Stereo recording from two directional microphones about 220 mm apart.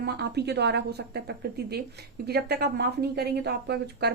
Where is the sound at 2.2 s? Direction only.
45° right (ahead or behind).